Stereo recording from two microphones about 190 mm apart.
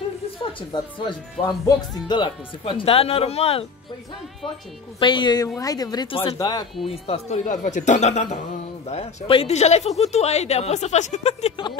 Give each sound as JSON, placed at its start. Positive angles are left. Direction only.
{"t": 0.4, "sound": "speech", "side_deg": 25}
{"t": 5.0, "sound": "speech", "side_deg": 25}
{"t": 6.9, "sound": "speech", "side_deg": 35}